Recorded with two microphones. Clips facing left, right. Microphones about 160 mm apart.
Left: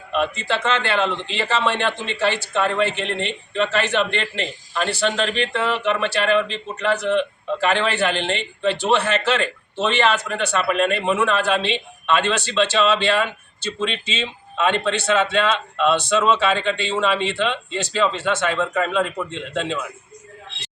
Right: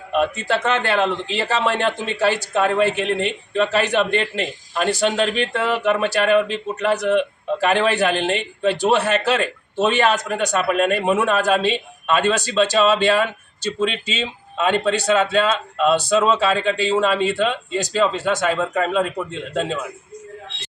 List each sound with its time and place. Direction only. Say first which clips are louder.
0.2 s speech: right 2 dB; 40° right (ahead or behind)